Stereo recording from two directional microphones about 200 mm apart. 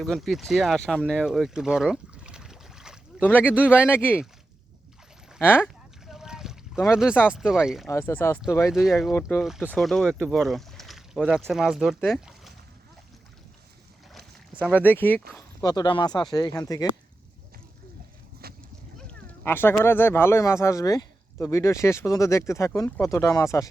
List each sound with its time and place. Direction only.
0.0 s speech: centre (ahead or behind)
3.2 s speech: 10° left (ahead or behind)
3.4 s speech: 5° right (ahead or behind)
3.7 s speech: 10° left (ahead or behind)
5.4 s speech: 10° left (ahead or behind)
5.6 s a sound: centre (ahead or behind)
6.9 s speech: 5° right (ahead or behind)
7.9 s speech: 10° left (ahead or behind)
8.7 s speech: centre (ahead or behind)
14.8 s speech: 10° left (ahead or behind)
18.4 s a sound: 50° right (ahead or behind)
19.3 s a sound: 10° left (ahead or behind)
19.8 s speech: 10° left (ahead or behind)